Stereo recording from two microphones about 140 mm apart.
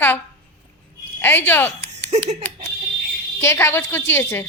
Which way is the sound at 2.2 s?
15° left (ahead or behind).